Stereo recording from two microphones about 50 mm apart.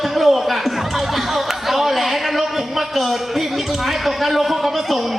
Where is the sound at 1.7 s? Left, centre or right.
Centre.